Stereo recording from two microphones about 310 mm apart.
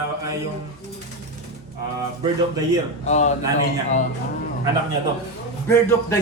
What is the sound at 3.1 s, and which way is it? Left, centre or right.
Speech, left.